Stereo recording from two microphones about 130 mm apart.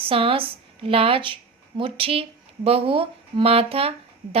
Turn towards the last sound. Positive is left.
turn(degrees=-50)  # may be behind; listen again after turning